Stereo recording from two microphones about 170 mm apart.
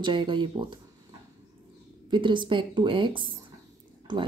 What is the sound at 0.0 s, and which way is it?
Speech, 30° right (ahead or behind).